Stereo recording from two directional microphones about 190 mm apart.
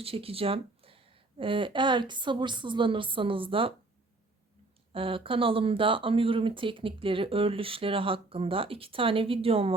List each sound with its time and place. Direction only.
0.0 s speech: 30° right (ahead or behind)
4.9 s speech: 30° right (ahead or behind)